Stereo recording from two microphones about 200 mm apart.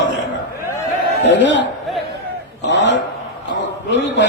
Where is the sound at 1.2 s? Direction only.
65° left (ahead or behind).